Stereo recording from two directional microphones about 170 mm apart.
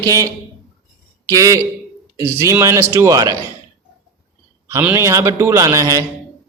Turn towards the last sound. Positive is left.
turn(degrees=-20)  # may be behind; listen again after turning